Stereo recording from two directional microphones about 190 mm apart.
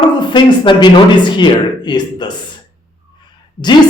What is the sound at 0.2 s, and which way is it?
A man's voice, 25° left (ahead or behind).